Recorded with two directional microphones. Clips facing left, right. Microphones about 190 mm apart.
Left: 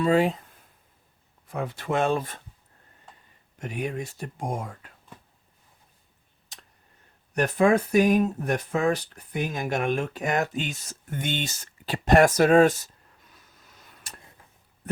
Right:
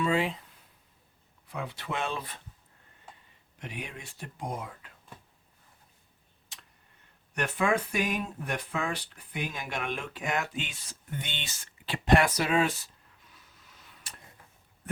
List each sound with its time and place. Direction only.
0.0 s speech: 40° left (ahead or behind)
3.6 s speech: 45° left (ahead or behind)
6.5 s tick: 40° left (ahead or behind)
7.3 s speech: 40° left (ahead or behind)